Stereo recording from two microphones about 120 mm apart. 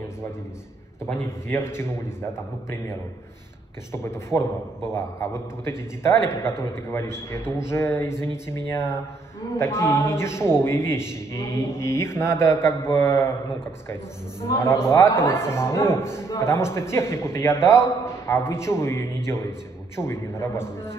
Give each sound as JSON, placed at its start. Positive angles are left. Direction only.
{"t": 1.5, "sound": "a man's voice", "side_deg": 20}
{"t": 3.9, "sound": "a man's voice", "side_deg": 20}